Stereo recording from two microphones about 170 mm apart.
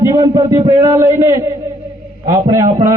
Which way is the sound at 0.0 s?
20° right (ahead or behind).